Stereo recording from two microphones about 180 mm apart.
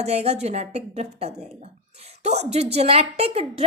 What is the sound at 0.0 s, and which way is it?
A woman's voice, 35° right (ahead or behind).